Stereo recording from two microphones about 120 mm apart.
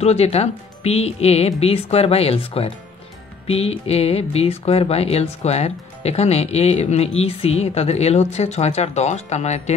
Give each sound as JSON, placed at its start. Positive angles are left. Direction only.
{"t": 0.0, "sound": "speech", "side_deg": 60}